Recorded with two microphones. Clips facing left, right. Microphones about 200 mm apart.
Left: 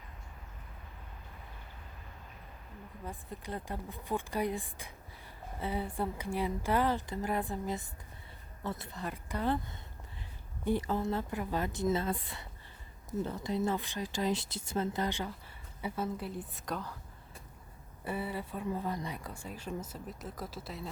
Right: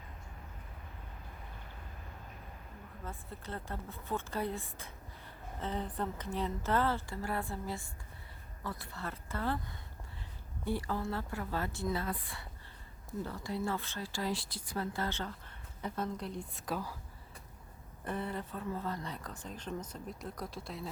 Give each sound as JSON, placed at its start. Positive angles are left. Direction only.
{"t": 3.0, "sound": "speech", "side_deg": 15}
{"t": 18.0, "sound": "speech", "side_deg": 5}